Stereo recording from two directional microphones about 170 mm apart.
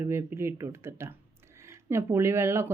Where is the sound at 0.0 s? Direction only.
15° right (ahead or behind).